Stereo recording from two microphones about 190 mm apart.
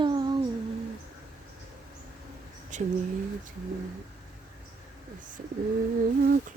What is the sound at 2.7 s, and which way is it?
Speech, 40° right (ahead or behind).